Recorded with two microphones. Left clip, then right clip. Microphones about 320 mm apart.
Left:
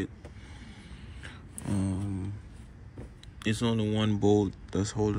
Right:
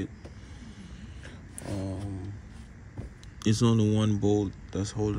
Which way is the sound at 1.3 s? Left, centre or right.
Left.